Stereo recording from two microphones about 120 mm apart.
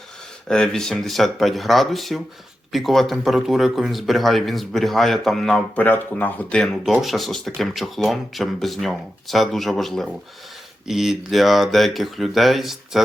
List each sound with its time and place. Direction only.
0.4 s speech: 5° left (ahead or behind)
5.8 s speech: 15° left (ahead or behind); by 13.0 s centre (ahead or behind)